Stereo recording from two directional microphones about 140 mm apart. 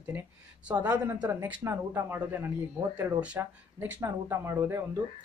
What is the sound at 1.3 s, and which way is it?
Speech, 15° right (ahead or behind).